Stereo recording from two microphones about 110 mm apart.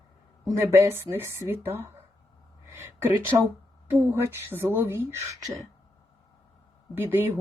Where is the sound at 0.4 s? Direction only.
25° right (ahead or behind).